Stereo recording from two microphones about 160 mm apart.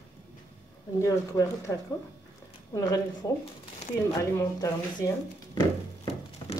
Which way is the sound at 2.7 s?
25° left (ahead or behind).